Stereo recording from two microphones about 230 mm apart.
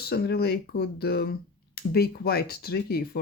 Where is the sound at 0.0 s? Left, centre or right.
Left.